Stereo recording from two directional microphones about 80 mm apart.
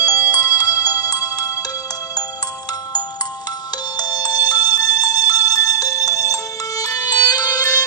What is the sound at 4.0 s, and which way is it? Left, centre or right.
Music, left.